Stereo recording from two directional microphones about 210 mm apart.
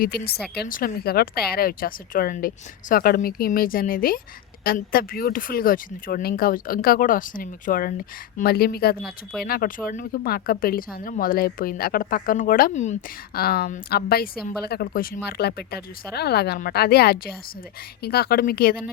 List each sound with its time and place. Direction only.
0.0 s speech: 45° left (ahead or behind)
9.0 s speech: centre (ahead or behind)
9.4 s speech: 45° left (ahead or behind)